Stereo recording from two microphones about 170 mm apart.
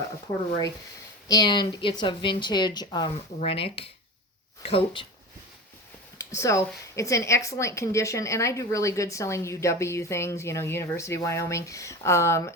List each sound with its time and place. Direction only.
1.3 s a woman's voice: 25° left (ahead or behind)
6.1 s a sound: 20° left (ahead or behind)
6.9 s speech: 20° left (ahead or behind)